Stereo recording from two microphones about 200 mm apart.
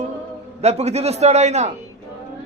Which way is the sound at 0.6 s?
35° right (ahead or behind).